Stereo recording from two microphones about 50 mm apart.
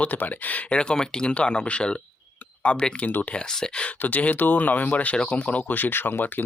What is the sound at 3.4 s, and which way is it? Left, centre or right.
Speech, centre.